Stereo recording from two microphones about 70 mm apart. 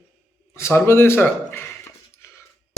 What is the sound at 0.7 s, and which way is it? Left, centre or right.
Speech, left.